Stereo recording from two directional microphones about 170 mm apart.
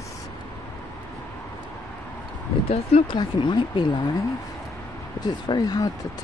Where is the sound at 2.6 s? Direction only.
35° left (ahead or behind).